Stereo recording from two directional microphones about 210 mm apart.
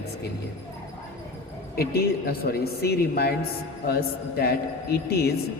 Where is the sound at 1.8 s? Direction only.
45° left (ahead or behind).